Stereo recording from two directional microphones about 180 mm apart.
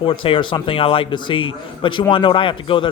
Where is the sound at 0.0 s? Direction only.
30° left (ahead or behind).